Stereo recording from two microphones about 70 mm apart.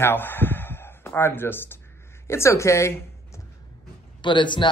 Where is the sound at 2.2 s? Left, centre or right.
Left.